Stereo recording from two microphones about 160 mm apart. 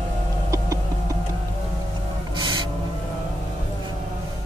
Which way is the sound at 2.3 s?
30° right (ahead or behind).